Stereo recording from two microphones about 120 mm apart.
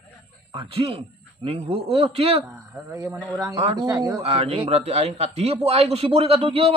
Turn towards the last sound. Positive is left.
turn(degrees=-50)  # may be behind; listen again after turning